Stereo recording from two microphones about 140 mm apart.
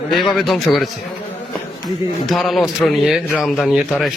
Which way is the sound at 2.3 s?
Centre (ahead or behind).